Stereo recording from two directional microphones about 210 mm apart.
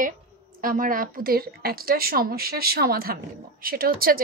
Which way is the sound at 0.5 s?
40° right (ahead or behind).